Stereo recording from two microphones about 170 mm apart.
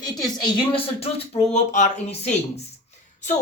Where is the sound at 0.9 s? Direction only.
40° left (ahead or behind).